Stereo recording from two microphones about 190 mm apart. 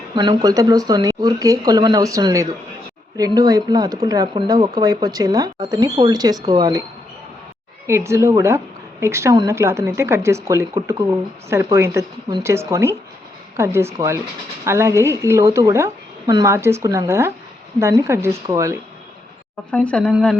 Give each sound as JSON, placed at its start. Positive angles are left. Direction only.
{"t": 0.1, "sound": "speech", "side_deg": -25}
{"t": 7.9, "sound": "speech", "side_deg": -15}
{"t": 19.7, "sound": "speech", "side_deg": 5}